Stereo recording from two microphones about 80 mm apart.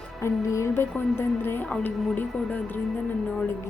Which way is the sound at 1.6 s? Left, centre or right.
Centre.